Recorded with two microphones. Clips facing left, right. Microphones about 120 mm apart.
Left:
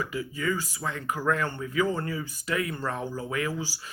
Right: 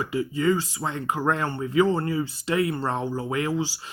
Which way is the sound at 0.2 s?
35° right (ahead or behind).